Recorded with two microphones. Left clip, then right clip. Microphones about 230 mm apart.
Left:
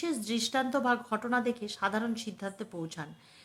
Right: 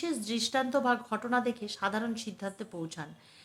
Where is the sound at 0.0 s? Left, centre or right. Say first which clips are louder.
Even; centre.